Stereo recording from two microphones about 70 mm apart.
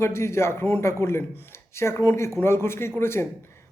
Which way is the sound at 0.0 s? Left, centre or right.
Left.